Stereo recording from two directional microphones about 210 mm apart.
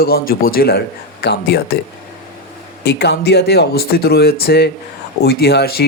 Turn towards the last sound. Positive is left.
turn(degrees=50)  # may be behind; listen again after turning